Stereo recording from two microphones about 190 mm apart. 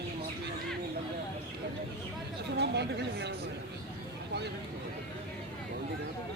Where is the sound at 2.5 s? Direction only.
60° right (ahead or behind).